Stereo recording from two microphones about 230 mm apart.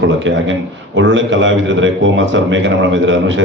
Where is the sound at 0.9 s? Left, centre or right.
Right.